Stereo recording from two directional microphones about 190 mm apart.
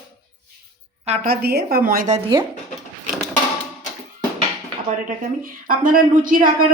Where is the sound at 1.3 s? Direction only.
55° right (ahead or behind).